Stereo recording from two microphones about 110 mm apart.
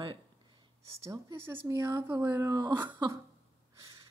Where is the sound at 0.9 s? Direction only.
25° right (ahead or behind).